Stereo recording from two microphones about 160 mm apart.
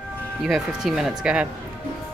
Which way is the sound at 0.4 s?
Centre (ahead or behind).